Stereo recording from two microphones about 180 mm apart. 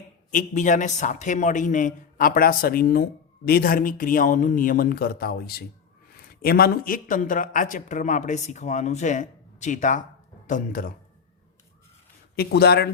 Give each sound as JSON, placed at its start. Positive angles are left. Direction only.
{"t": 0.3, "sound": "a man's voice", "side_deg": 45}
{"t": 12.4, "sound": "speech", "side_deg": 60}